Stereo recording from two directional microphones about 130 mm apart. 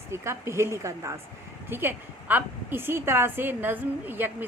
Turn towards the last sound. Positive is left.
turn(degrees=-15)  # may be behind; listen again after turning